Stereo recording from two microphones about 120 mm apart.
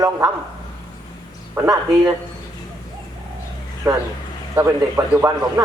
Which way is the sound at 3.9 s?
30° right (ahead or behind).